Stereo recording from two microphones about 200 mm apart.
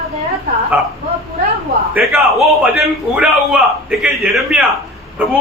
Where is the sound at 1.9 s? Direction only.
Centre (ahead or behind).